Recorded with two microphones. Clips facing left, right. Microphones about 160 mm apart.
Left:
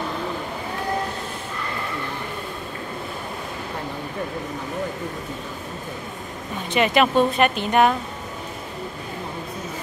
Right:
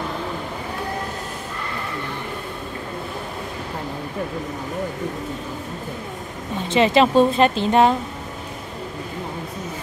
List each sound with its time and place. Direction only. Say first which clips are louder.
6.7 s speech: right 3 dB; 25° right (ahead or behind)